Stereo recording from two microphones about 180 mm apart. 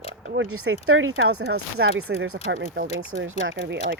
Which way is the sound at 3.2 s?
90° right.